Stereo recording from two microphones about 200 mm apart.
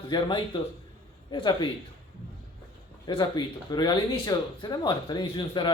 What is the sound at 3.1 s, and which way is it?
Speech, 25° left (ahead or behind).